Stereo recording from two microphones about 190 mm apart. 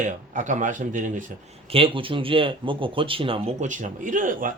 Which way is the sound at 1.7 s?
30° right (ahead or behind).